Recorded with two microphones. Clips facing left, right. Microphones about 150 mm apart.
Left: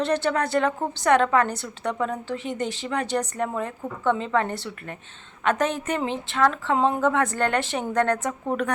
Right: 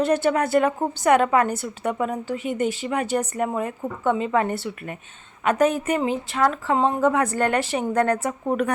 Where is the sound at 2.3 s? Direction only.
5° right (ahead or behind).